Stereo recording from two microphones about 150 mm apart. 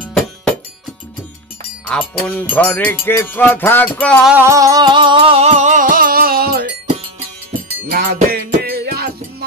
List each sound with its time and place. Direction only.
0.0 s music: 5° left (ahead or behind)
1.9 s a sound: 5° left (ahead or behind)
4.2 s music: 10° right (ahead or behind)
4.5 s music: 20° right (ahead or behind); by 6.6 s 85° right
7.9 s music: 80° right